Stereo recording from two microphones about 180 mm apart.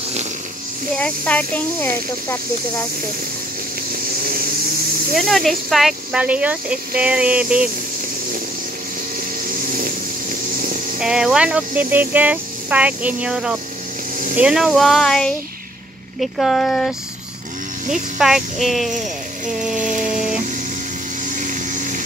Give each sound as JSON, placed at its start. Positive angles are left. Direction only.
{"t": 0.9, "sound": "speech", "side_deg": 5}
{"t": 3.9, "sound": "vehicle", "side_deg": -55}
{"t": 5.1, "sound": "speech", "side_deg": 0}
{"t": 9.4, "sound": "vehicle", "side_deg": -50}
{"t": 11.0, "sound": "speech", "side_deg": -5}
{"t": 14.1, "sound": "a sound", "side_deg": -45}
{"t": 14.4, "sound": "speech", "side_deg": -5}
{"t": 18.1, "sound": "speech", "side_deg": 0}
{"t": 19.8, "sound": "a sound", "side_deg": -45}
{"t": 21.3, "sound": "vehicle", "side_deg": -45}